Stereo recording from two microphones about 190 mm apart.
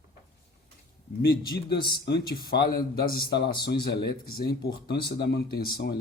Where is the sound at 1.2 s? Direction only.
55° left (ahead or behind).